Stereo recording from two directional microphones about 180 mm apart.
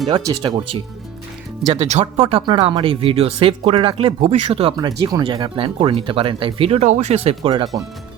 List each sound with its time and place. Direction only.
0.3 s speech: 25° right (ahead or behind)
1.7 s speech: 35° right (ahead or behind)